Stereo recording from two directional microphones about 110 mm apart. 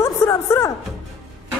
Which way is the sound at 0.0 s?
25° left (ahead or behind).